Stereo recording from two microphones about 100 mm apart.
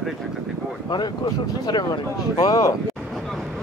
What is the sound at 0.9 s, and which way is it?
Speech, 45° left (ahead or behind).